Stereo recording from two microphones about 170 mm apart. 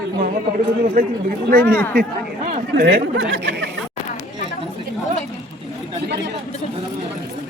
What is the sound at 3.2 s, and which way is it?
Speech, 90° right.